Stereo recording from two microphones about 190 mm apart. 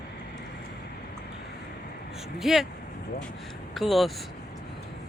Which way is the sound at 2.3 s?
Centre (ahead or behind).